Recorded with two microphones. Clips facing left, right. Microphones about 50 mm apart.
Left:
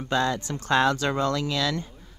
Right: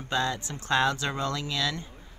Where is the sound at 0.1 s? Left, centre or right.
Left.